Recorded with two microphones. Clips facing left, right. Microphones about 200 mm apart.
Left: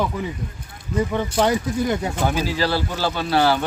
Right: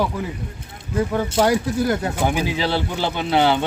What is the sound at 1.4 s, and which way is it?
Speech, 10° right (ahead or behind).